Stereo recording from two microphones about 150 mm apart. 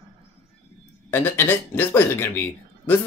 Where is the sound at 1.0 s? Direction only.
15° left (ahead or behind).